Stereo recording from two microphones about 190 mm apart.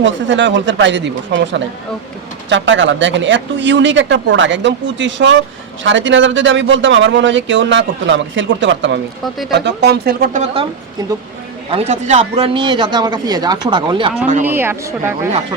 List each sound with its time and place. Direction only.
0.0 s speech: 75° right (ahead or behind); by 10.7 s 35° right (ahead or behind)
11.7 s a man's voice: 35° right (ahead or behind)
14.4 s speech: 10° right (ahead or behind)